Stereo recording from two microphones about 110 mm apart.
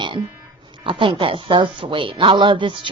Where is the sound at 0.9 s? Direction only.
50° right (ahead or behind).